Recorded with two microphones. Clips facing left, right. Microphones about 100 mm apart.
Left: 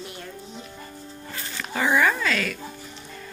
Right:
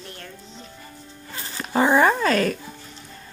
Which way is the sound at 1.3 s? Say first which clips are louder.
Right 7 dB; 30° right (ahead or behind).